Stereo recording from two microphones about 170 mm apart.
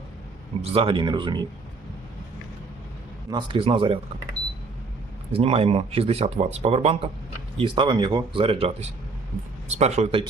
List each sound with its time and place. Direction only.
0.6 s speech: 35° right (ahead or behind)
3.2 s speech: 25° right (ahead or behind)
5.3 s speech: 35° right (ahead or behind)